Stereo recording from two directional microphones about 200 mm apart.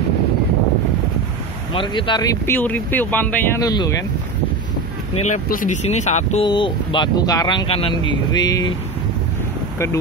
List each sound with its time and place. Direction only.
1.7 s speech: 25° left (ahead or behind)
5.2 s speech: 40° left (ahead or behind)
6.4 s speech: 25° left (ahead or behind)